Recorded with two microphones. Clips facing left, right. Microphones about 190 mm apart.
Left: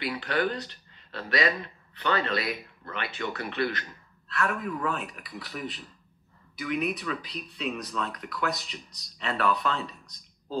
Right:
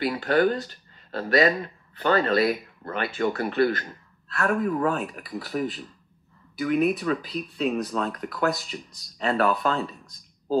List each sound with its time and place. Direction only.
0.0 s a man's voice: 45° right (ahead or behind)
7.2 s speech: centre (ahead or behind)
7.5 s a man's voice: 45° right (ahead or behind)